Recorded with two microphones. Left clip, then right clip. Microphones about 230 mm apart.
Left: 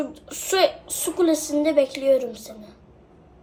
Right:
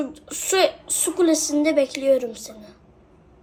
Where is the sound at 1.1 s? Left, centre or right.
Right.